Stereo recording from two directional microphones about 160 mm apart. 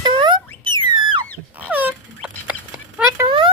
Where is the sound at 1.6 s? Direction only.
10° right (ahead or behind).